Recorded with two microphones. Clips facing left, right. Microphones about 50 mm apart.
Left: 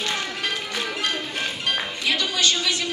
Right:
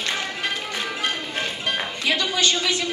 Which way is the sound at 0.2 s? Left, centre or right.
Right.